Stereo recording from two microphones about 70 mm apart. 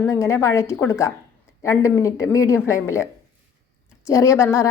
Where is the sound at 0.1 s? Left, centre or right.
Left.